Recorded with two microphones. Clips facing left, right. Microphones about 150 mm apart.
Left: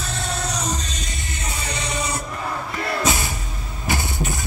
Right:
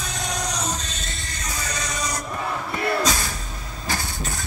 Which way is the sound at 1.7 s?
30° left (ahead or behind).